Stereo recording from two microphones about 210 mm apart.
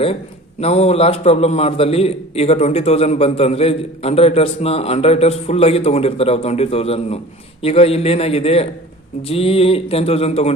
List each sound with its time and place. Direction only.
0.6 s a man's voice: 30° left (ahead or behind)